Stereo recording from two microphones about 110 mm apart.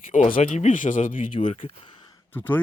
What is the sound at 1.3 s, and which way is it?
Speech, 55° left (ahead or behind).